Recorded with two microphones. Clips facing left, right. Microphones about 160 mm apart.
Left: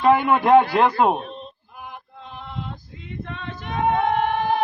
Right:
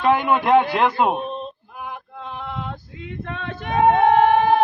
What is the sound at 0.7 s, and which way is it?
Speech, 35° left (ahead or behind).